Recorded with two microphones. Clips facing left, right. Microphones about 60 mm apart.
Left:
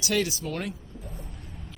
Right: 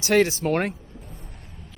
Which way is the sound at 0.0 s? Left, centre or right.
Right.